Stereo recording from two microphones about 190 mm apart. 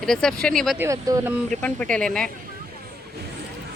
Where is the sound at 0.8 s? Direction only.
15° right (ahead or behind).